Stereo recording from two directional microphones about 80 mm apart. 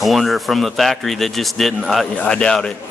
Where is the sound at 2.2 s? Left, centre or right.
Centre.